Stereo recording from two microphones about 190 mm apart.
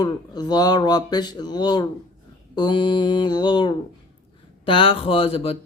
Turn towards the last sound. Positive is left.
turn(degrees=30)  # may be behind; listen again after turning